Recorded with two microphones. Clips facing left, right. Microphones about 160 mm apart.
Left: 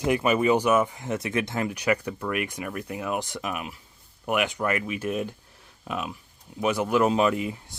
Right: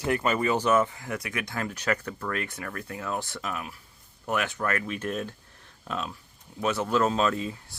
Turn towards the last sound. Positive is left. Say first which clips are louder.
# left 3 dB
turn(degrees=15)  # may be behind; listen again after turning